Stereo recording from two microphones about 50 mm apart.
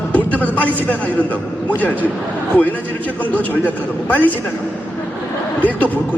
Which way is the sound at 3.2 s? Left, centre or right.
Left.